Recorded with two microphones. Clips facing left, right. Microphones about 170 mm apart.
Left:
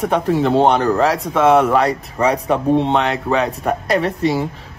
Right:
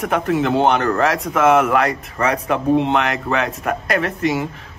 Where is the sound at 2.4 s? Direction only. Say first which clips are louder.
Left 1 dB; 30° left (ahead or behind).